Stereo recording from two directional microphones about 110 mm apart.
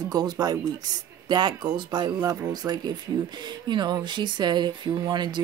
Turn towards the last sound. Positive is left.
turn(degrees=-40)  # may be behind; listen again after turning